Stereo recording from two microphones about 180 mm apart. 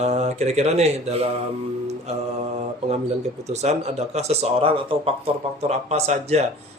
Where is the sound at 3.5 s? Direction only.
40° right (ahead or behind).